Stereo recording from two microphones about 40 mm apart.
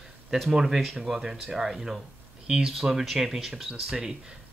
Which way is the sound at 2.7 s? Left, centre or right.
Centre.